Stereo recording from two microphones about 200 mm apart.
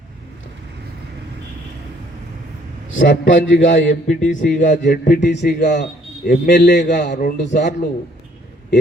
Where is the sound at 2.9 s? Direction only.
65° left (ahead or behind).